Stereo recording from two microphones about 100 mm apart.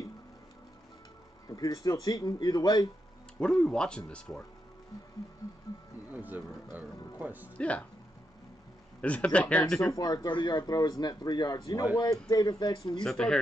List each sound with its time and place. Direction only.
1.5 s speech: 35° left (ahead or behind)
3.3 s speech: 10° left (ahead or behind)
5.7 s speech: 35° left (ahead or behind)
6.1 s speech: 15° right (ahead or behind)
7.5 s speech: 15° left (ahead or behind)
9.0 s speech: 10° left (ahead or behind)
9.9 s speech: 45° left (ahead or behind)
13.0 s speech: 5° left (ahead or behind)